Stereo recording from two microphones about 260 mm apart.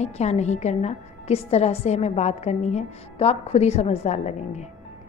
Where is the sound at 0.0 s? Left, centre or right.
Left.